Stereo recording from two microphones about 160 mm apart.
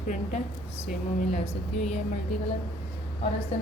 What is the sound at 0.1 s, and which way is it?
Speech, 50° left (ahead or behind).